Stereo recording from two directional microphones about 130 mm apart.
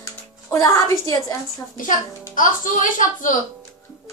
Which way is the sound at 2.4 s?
90° left.